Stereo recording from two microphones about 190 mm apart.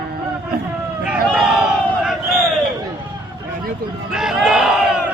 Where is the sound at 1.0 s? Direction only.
5° right (ahead or behind).